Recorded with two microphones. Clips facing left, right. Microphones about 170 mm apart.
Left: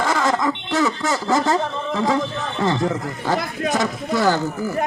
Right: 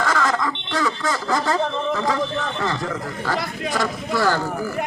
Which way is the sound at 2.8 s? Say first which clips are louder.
Left 4 dB; 25° left (ahead or behind).